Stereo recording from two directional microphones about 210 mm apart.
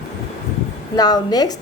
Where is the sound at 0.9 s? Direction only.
20° left (ahead or behind).